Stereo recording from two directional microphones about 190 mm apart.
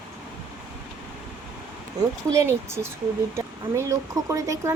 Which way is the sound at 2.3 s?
15° right (ahead or behind).